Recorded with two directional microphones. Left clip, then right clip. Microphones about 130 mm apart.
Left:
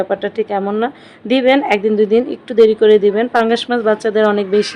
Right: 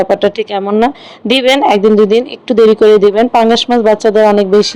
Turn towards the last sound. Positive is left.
turn(degrees=-35)  # may be behind; listen again after turning